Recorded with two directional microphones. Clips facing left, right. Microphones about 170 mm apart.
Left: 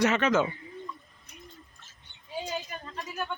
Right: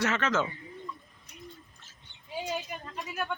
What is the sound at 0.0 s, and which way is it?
Speech, 15° left (ahead or behind).